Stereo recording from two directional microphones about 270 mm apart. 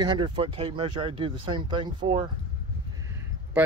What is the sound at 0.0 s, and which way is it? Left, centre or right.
Speech, centre.